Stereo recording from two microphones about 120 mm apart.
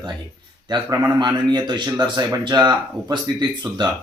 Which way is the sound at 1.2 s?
35° right (ahead or behind).